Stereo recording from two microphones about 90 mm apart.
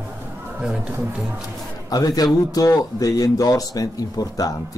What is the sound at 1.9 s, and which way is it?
Speech, 45° left (ahead or behind).